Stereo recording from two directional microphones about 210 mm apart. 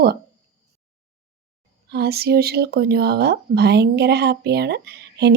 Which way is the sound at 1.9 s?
50° right (ahead or behind).